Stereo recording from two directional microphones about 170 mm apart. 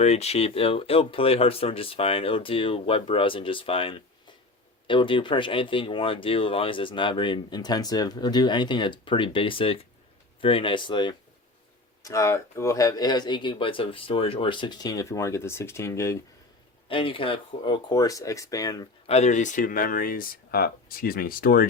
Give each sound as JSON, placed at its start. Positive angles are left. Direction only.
{"t": 0.0, "sound": "speech", "side_deg": 40}
{"t": 16.9, "sound": "speech", "side_deg": 30}
{"t": 19.0, "sound": "speech", "side_deg": 40}